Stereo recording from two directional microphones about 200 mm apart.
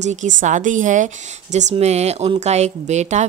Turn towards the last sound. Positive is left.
turn(degrees=-35)  # may be behind; listen again after turning